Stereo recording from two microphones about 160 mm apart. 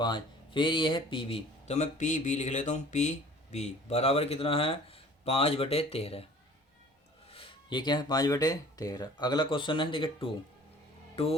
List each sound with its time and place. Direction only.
0.0 s speech: 30° left (ahead or behind)
1.6 s speech: 45° left (ahead or behind)
7.3 s speech: 35° left (ahead or behind)